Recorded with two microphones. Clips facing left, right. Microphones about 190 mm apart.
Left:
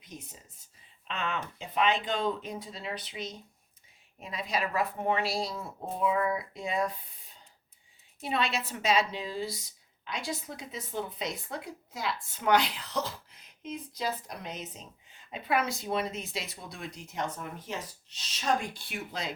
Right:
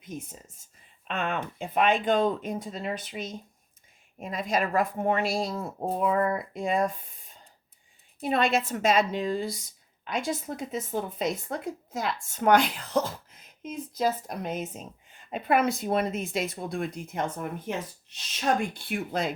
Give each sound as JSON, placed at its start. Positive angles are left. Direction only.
{"t": 0.0, "sound": "a woman's voice", "side_deg": -50}